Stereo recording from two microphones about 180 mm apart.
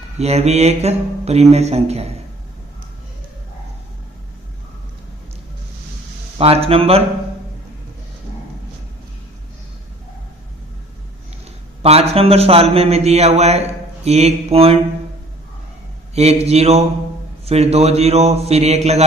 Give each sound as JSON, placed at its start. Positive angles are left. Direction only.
{"t": 0.2, "sound": "a man's voice", "side_deg": -35}
{"t": 6.4, "sound": "a man's voice", "side_deg": -35}
{"t": 11.8, "sound": "a man's voice", "side_deg": -35}
{"t": 16.1, "sound": "a man's voice", "side_deg": -35}